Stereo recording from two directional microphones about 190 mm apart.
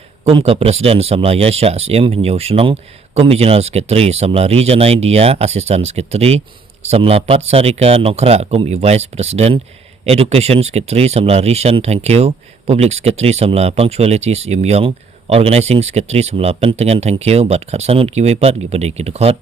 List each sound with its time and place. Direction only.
0.3 s speech: 30° right (ahead or behind)